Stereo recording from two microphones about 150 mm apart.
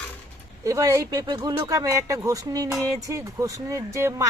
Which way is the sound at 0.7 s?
20° right (ahead or behind).